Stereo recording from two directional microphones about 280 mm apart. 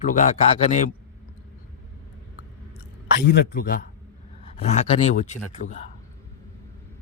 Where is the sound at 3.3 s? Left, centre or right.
Left.